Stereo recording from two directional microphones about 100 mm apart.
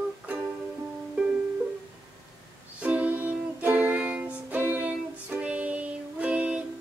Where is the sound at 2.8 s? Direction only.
15° right (ahead or behind).